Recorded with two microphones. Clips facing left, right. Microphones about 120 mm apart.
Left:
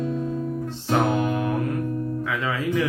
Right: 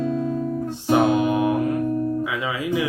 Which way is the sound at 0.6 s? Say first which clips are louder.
Right 4 dB; 15° right (ahead or behind).